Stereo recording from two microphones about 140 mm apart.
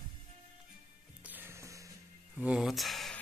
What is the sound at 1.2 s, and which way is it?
Music, 15° right (ahead or behind).